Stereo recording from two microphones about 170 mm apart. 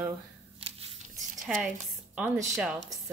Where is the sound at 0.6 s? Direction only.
35° right (ahead or behind).